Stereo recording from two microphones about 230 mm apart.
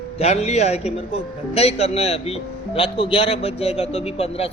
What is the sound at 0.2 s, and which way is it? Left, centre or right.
Speech, left.